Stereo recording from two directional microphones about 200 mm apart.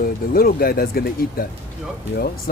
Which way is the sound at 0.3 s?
50° left (ahead or behind).